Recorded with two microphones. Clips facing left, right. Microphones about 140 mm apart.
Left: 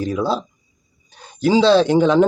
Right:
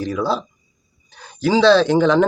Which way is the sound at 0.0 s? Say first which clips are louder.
Left 1 dB; 20° left (ahead or behind).